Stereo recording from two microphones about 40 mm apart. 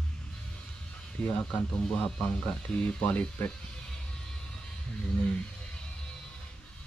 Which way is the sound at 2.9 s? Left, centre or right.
Left.